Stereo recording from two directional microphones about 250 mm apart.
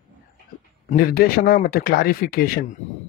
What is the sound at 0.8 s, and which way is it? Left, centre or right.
A man's voice, left.